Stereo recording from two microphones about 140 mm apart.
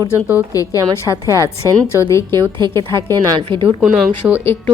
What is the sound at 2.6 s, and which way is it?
A woman's voice, 30° right (ahead or behind).